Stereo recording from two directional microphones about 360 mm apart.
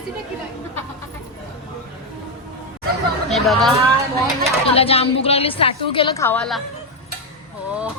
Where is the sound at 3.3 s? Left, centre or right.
Centre.